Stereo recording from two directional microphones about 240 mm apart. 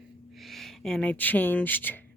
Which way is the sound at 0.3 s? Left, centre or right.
Centre.